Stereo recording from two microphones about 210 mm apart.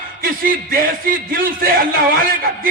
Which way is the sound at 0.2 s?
45° right (ahead or behind).